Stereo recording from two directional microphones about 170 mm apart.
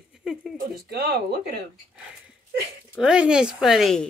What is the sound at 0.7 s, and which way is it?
Speech, 65° right (ahead or behind).